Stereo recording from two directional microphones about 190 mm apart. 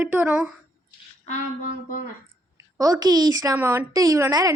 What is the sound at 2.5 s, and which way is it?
A woman's voice, 20° right (ahead or behind).